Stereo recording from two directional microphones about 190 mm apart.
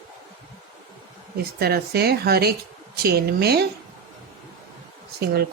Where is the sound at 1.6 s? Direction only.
55° right (ahead or behind).